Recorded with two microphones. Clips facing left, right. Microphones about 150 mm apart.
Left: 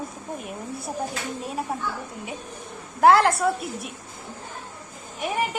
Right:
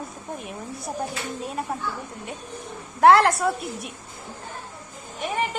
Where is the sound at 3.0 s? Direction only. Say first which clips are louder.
Right 1 dB; centre (ahead or behind).